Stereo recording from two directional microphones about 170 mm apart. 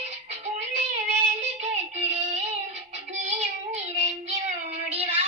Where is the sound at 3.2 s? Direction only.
40° right (ahead or behind).